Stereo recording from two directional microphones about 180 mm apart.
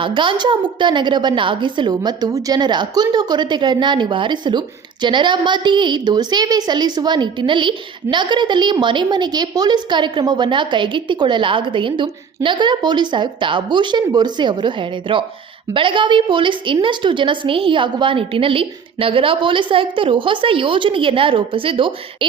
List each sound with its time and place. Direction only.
0.0 s a woman's voice: 25° right (ahead or behind)